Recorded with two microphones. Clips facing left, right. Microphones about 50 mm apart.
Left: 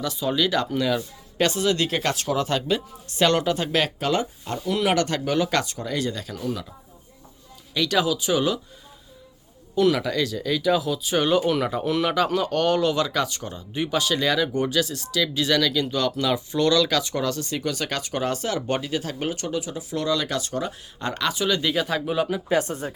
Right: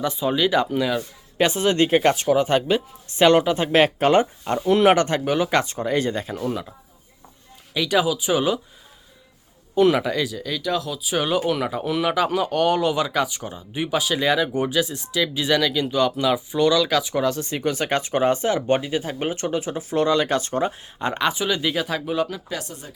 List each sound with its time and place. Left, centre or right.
0.0 s speech: right
1.5 s speech: right
2.2 s speech: centre
5.7 s speech: right
7.7 s speech: centre
9.7 s speech: right
10.3 s speech: centre
22.4 s speech: left